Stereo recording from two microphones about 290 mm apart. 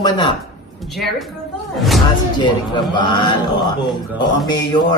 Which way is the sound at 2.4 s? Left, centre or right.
Centre.